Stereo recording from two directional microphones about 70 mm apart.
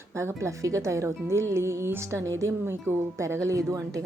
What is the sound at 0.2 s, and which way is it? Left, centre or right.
Speech, right.